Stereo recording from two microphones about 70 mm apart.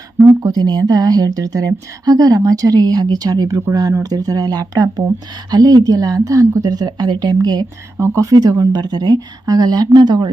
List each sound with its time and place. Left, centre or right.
0.4 s a woman's voice: right
6.7 s speech: right
7.9 s speech: right